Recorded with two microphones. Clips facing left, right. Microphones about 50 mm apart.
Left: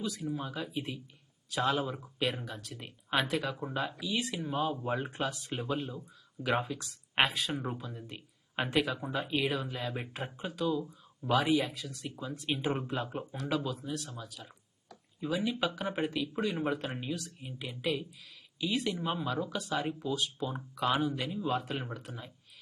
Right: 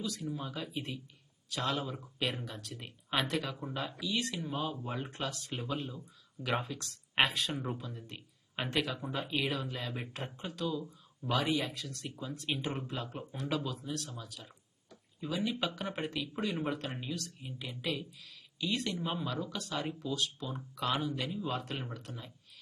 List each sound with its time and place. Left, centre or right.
0.0 s speech: centre
12.9 s speech: centre
13.3 s speech: centre